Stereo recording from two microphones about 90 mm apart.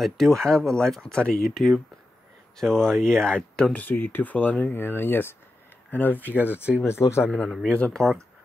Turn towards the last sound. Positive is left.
turn(degrees=10)  # may be behind; listen again after turning